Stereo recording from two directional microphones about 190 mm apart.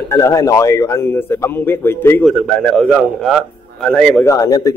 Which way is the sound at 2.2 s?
Centre (ahead or behind).